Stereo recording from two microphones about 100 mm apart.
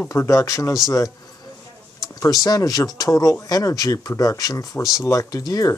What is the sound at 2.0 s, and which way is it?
Speech, 35° left (ahead or behind).